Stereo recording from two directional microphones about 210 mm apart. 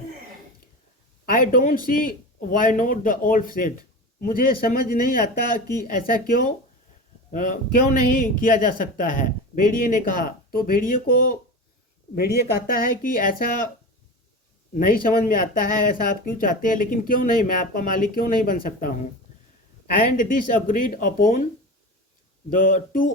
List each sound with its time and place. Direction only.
1.2 s a man's voice: 40° left (ahead or behind)
14.8 s speech: 40° left (ahead or behind)
20.1 s speech: 40° left (ahead or behind)
22.4 s speech: 40° left (ahead or behind)